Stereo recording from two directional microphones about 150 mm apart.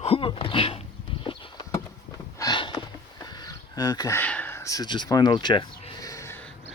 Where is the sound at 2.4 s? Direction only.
30° left (ahead or behind).